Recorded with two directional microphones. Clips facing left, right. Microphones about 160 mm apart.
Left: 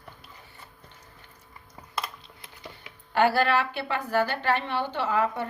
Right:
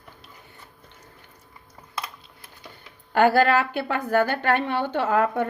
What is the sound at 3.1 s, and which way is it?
A woman's voice, 50° right (ahead or behind).